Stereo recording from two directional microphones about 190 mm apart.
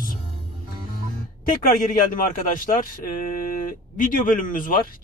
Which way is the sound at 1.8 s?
45° left (ahead or behind).